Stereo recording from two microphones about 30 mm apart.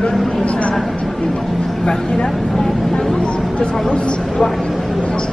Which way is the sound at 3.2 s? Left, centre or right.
Left.